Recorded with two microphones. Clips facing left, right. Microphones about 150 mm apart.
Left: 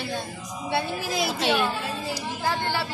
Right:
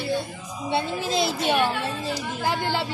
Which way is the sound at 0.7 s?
20° right (ahead or behind).